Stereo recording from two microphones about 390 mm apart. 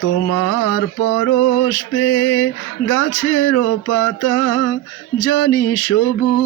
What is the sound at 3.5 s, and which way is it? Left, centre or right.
Mantra, left.